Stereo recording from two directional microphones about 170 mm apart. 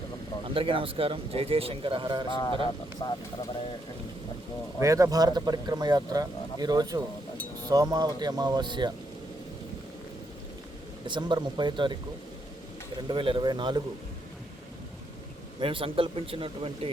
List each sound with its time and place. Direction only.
0.4 s speech: 30° right (ahead or behind)
3.0 s speech: 20° left (ahead or behind)
4.8 s a man's voice: 20° right (ahead or behind)
11.0 s a man's voice: 25° right (ahead or behind)
13.1 s a man's voice: 30° right (ahead or behind)
15.6 s speech: 30° right (ahead or behind)